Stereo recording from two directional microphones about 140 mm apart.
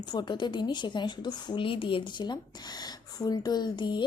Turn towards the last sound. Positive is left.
turn(degrees=35)  # may be behind; listen again after turning